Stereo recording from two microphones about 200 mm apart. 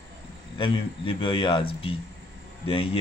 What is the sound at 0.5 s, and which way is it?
A man's voice, 25° left (ahead or behind).